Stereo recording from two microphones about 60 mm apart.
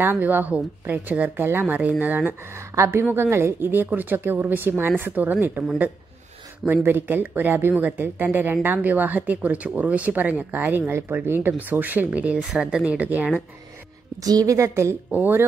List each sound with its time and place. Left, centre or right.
0.0 s speech: right
1.8 s speech: right
2.7 s a woman's voice: right
3.1 s speech: right
6.7 s speech: right
10.9 s a woman's voice: right
14.2 s a woman's voice: right
15.0 s speech: right